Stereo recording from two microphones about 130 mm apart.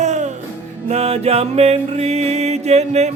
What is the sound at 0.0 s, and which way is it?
Music, 65° right (ahead or behind).